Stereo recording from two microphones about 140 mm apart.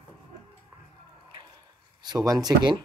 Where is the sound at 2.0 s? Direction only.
30° right (ahead or behind).